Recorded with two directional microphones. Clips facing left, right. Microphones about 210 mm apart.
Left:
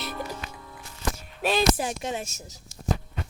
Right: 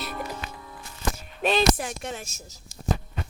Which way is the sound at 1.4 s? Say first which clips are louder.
Right 2 dB; 5° left (ahead or behind).